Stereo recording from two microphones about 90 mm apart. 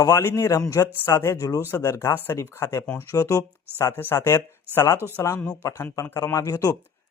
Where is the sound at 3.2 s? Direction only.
40° left (ahead or behind).